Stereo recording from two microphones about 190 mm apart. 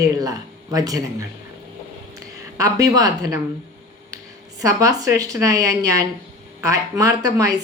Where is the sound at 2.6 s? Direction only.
15° right (ahead or behind).